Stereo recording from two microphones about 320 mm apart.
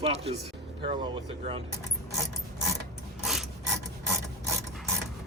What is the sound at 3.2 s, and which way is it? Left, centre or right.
Ratchet, centre.